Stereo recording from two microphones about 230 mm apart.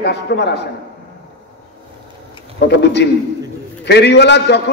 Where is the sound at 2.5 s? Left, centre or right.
Left.